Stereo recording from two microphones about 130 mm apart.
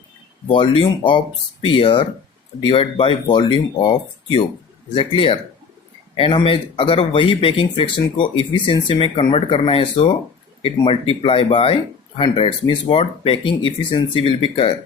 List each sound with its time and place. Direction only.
0.4 s speech: 40° left (ahead or behind)